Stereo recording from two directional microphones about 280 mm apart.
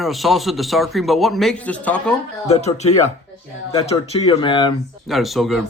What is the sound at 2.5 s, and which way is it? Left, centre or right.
Speech, left.